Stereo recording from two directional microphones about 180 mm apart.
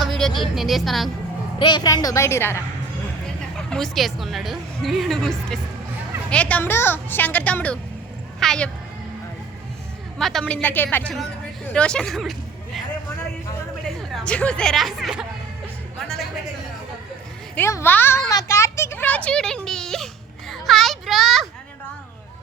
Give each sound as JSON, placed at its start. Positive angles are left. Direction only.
{"t": 0.0, "sound": "speech", "side_deg": 0}
{"t": 1.5, "sound": "a woman's voice", "side_deg": 25}
{"t": 3.7, "sound": "a woman's voice", "side_deg": 0}
{"t": 10.2, "sound": "a woman's voice", "side_deg": 0}
{"t": 11.7, "sound": "a sound", "side_deg": 5}
{"t": 13.8, "sound": "speech", "side_deg": 5}
{"t": 16.0, "sound": "music", "side_deg": 5}
{"t": 17.5, "sound": "a child's voice", "side_deg": 15}